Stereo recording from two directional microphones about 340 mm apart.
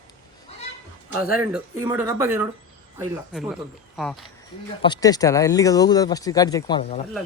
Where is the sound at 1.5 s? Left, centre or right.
Centre.